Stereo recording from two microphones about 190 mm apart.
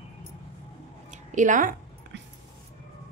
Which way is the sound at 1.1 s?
40° right (ahead or behind).